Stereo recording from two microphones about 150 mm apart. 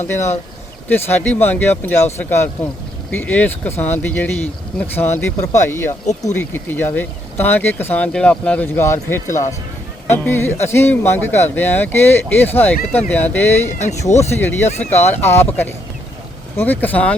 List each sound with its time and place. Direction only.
0.1 s speech: 15° left (ahead or behind)
13.7 s speech: 50° left (ahead or behind)
14.3 s speech: 15° left (ahead or behind)